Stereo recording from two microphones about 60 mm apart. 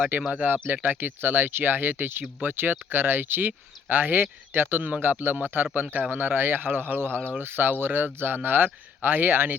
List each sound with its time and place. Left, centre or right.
0.3 s speech: right